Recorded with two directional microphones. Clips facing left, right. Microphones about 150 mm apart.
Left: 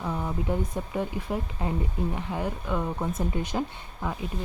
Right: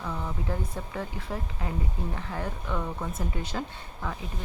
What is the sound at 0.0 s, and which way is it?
Speech, 20° left (ahead or behind).